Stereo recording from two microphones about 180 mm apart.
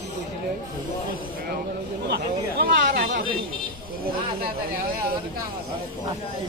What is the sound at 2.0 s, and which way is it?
Speech, 65° right (ahead or behind).